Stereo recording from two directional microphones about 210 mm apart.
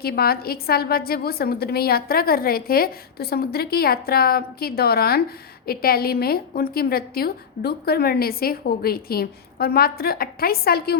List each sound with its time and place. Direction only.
0.0 s a woman's voice: 45° left (ahead or behind)